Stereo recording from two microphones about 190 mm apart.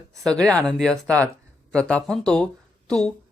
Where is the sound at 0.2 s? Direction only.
5° left (ahead or behind).